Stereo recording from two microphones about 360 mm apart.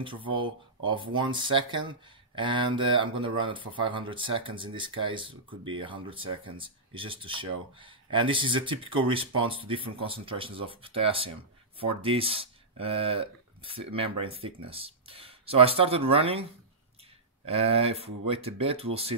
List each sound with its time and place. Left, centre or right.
0.0 s speech: centre
17.5 s speech: centre